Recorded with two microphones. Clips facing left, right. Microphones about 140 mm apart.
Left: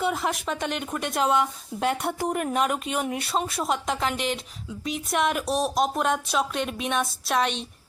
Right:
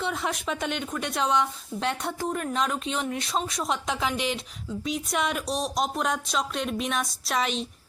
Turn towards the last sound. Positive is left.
turn(degrees=0)  # may be behind; listen again after turning